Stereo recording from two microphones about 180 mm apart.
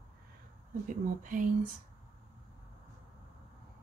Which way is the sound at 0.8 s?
45° right (ahead or behind).